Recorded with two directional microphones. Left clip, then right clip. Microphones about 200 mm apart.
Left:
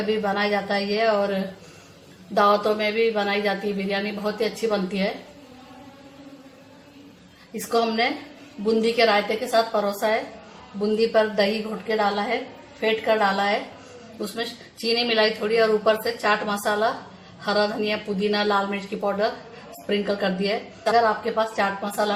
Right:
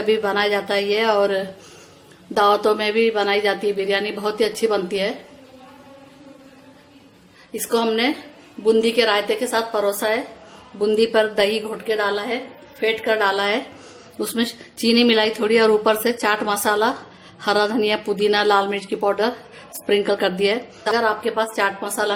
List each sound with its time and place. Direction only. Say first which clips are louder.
0.1 s speech: right 5 dB; 60° right (ahead or behind)
7.7 s speech: right 2 dB; 55° right (ahead or behind)
12.8 s speech: right 2 dB; 60° right (ahead or behind)